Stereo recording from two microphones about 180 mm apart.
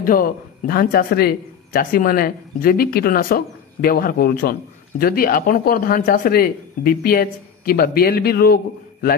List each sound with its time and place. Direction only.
0.0 s a man's voice: 50° left (ahead or behind)